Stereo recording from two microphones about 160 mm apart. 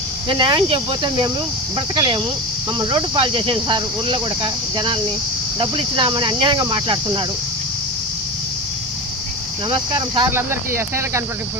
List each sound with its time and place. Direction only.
0.3 s speech: 25° right (ahead or behind)
9.6 s speech: 30° right (ahead or behind)
10.2 s speech: 15° right (ahead or behind)